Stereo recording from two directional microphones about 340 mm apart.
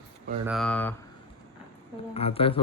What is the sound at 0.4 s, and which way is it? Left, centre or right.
Speech, centre.